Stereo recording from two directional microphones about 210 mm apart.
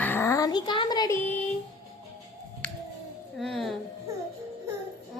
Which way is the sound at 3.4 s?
Centre (ahead or behind).